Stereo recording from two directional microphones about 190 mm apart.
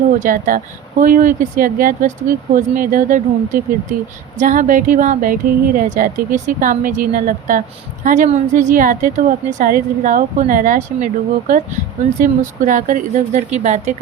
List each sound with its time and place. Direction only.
0.2 s speech: 45° right (ahead or behind)